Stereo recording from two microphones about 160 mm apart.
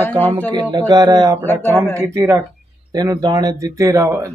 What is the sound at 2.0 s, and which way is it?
Speech, 20° right (ahead or behind).